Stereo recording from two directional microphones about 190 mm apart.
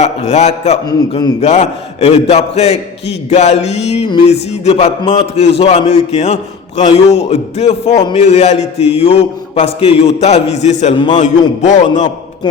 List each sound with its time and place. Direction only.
0.0 s a man's voice: 35° left (ahead or behind)